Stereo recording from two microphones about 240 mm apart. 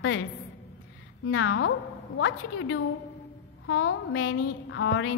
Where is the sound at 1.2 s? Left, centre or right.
Left.